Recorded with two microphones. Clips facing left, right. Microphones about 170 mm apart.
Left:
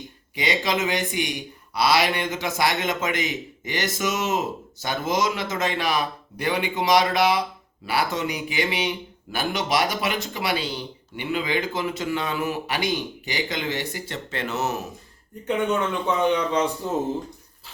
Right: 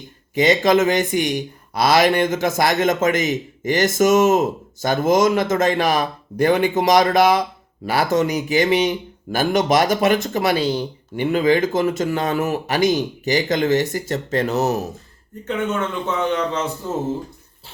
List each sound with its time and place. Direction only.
0.3 s speech: 45° right (ahead or behind)
16.3 s speech: 15° left (ahead or behind)